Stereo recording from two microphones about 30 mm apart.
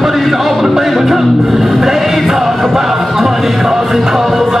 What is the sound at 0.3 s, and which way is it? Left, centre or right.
Music, centre.